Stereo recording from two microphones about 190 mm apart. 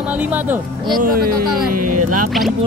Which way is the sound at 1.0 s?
50° right (ahead or behind).